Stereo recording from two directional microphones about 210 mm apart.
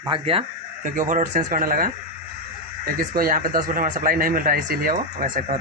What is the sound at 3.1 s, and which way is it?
Speech, 45° right (ahead or behind).